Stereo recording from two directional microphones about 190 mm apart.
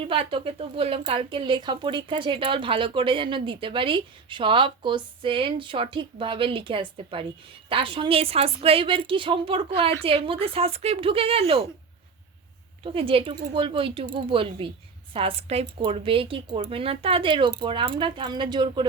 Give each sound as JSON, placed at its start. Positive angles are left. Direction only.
{"t": 0.0, "sound": "speech", "side_deg": -30}
{"t": 12.8, "sound": "speech", "side_deg": -30}